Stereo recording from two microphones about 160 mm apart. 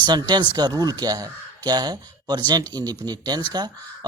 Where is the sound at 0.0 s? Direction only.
25° right (ahead or behind).